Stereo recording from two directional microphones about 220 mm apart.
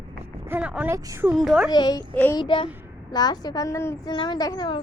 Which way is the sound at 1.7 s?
20° left (ahead or behind).